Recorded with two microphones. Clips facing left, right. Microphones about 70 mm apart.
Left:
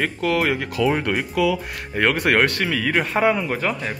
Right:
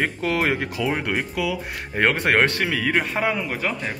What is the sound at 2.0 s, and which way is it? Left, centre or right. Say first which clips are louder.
Speech: left 1 dB; right.